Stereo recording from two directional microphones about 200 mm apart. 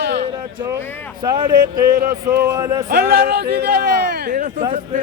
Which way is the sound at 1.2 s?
20° right (ahead or behind).